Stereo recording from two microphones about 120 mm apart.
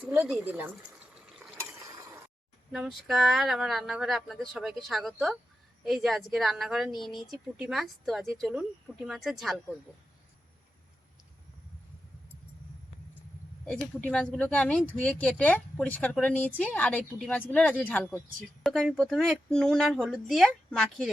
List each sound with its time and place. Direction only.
0.0 s speech: 15° right (ahead or behind)
1.8 s mechanisms: 25° right (ahead or behind)
2.7 s speech: centre (ahead or behind)
13.7 s speech: 10° left (ahead or behind)
18.6 s speech: centre (ahead or behind)